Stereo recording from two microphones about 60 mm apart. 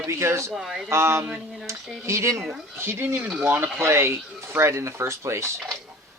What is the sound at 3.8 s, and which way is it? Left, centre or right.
Speech, right.